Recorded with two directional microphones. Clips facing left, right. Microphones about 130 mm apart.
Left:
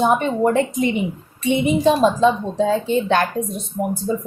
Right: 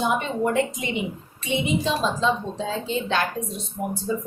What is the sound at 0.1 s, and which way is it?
A woman's voice, 45° left (ahead or behind).